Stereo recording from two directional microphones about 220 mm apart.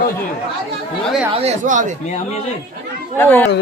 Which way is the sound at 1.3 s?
30° right (ahead or behind).